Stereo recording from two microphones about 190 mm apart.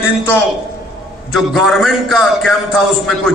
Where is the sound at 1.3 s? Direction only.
Centre (ahead or behind).